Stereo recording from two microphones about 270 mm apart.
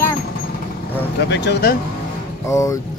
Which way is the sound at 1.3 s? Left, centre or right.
Left.